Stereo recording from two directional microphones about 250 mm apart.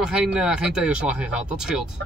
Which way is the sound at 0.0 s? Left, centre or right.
Centre.